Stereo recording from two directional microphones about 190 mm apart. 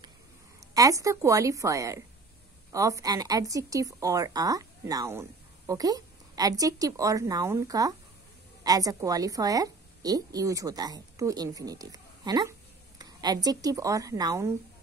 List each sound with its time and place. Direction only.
0.6 s a woman's voice: 20° right (ahead or behind)